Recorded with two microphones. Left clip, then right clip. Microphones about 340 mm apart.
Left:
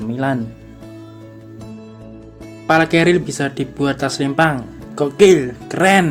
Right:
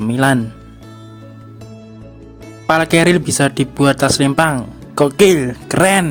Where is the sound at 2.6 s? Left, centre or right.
Right.